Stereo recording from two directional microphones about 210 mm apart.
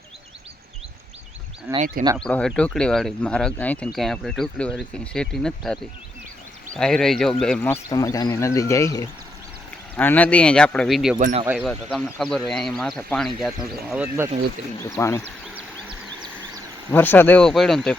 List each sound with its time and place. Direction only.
1.7 s speech: 10° right (ahead or behind)
2.1 s speech: 5° left (ahead or behind)
11.2 s speech: 35° right (ahead or behind)
11.4 s speech: 5° right (ahead or behind)
14.8 s speech: 15° left (ahead or behind)
16.9 s speech: 10° left (ahead or behind)